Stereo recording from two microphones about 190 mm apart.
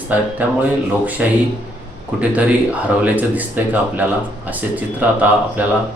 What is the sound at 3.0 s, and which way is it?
Speech, 10° right (ahead or behind).